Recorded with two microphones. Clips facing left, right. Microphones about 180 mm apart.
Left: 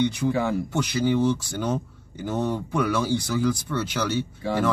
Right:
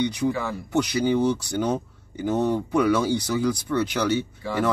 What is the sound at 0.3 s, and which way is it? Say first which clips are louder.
Speech: left 3 dB; 25° left (ahead or behind).